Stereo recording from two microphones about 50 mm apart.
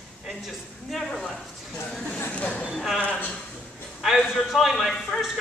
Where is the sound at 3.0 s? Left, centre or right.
Left.